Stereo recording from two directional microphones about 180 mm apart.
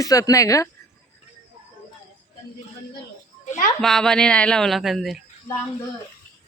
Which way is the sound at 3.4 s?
40° left (ahead or behind).